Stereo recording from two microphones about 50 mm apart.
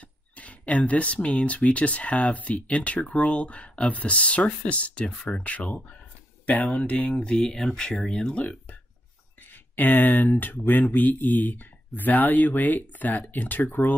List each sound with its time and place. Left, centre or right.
0.0 s speech: left
6.4 s speech: left; by 8.5 s centre
9.5 s speech: left